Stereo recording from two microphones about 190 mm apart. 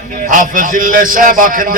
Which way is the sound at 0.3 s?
45° right (ahead or behind).